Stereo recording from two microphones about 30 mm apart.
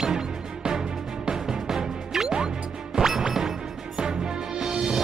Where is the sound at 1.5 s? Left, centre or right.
Centre.